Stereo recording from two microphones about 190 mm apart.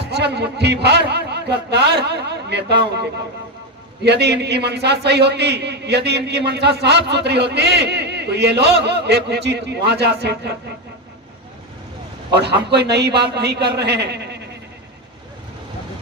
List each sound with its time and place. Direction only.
0.0 s a man's voice: 60° right (ahead or behind)
12.4 s a man's voice: 60° right (ahead or behind)